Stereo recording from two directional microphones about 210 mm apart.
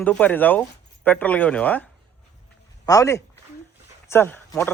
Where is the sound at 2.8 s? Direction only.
15° left (ahead or behind).